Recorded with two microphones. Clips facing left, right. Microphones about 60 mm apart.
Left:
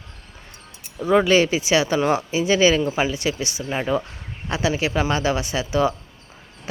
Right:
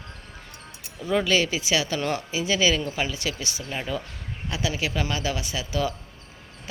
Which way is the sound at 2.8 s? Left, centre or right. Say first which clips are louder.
Left 6 dB; centre.